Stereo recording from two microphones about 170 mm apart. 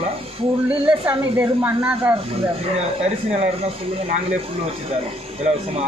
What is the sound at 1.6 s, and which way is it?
Speech, 10° right (ahead or behind).